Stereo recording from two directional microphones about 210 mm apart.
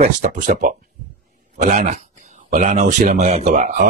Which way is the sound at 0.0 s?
35° right (ahead or behind).